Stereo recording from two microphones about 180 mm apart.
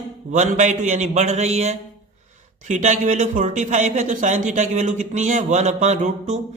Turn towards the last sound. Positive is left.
turn(degrees=-40)  # may be behind; listen again after turning